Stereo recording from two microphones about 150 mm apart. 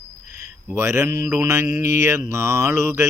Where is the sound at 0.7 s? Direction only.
20° right (ahead or behind).